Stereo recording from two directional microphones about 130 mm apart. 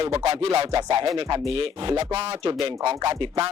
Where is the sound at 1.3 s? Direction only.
45° right (ahead or behind).